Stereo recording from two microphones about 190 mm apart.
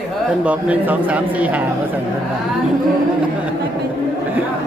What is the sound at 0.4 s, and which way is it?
A man's voice, 5° right (ahead or behind).